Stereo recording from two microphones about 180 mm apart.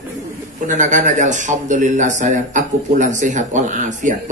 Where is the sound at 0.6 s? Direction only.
45° right (ahead or behind).